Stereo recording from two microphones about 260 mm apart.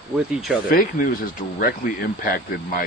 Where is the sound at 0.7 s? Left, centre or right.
Left.